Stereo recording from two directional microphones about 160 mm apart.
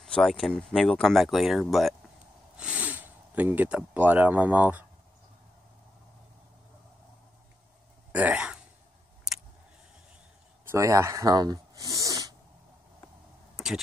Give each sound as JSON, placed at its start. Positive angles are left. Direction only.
{"t": 0.0, "sound": "speech", "side_deg": 0}
{"t": 8.1, "sound": "speech", "side_deg": -10}
{"t": 10.6, "sound": "speech", "side_deg": -15}